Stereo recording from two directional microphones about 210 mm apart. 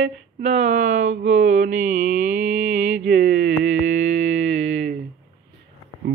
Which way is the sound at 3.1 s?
40° right (ahead or behind).